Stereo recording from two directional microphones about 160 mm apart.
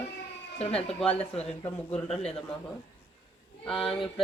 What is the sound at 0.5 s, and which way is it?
Speech, 40° left (ahead or behind).